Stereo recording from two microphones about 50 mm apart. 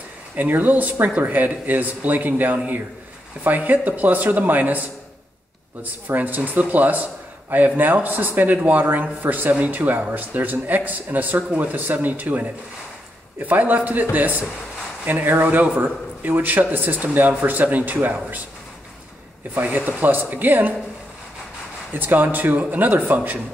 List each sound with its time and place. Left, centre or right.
0.4 s speech: right
19.5 s speech: right
21.9 s speech: right